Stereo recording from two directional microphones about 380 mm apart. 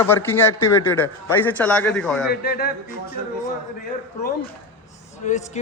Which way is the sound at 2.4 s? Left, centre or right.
Left.